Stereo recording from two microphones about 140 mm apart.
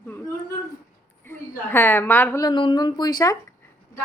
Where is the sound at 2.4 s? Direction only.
30° left (ahead or behind).